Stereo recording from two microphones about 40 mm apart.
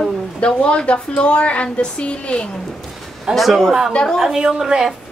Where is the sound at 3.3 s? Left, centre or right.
Centre.